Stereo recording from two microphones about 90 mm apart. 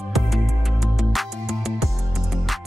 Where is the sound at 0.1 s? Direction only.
Centre (ahead or behind).